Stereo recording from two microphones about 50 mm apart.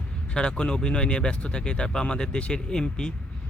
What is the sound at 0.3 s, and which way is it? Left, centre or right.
Speech, centre.